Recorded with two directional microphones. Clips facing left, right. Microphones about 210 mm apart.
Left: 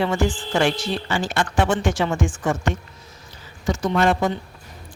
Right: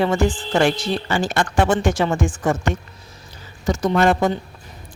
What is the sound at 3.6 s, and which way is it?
Speech, 40° right (ahead or behind).